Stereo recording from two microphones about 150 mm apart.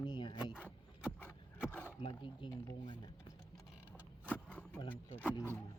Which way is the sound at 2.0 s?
35° left (ahead or behind).